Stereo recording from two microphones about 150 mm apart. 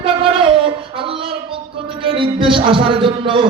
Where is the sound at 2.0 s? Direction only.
35° right (ahead or behind).